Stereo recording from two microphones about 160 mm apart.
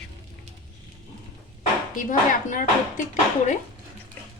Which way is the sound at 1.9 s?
55° left (ahead or behind).